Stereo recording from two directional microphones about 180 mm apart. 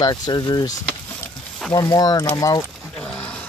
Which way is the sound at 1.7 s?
20° left (ahead or behind).